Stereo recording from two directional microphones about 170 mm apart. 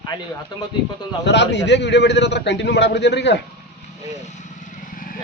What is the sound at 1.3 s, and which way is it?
A man's voice, 90° left.